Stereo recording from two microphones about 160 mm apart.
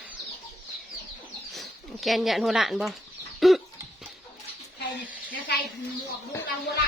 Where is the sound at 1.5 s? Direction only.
Centre (ahead or behind).